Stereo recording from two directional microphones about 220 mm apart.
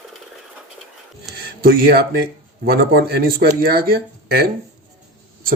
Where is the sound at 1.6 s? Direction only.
40° right (ahead or behind).